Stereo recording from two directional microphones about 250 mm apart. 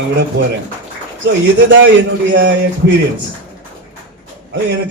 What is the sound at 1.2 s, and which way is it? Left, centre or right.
Speech, right.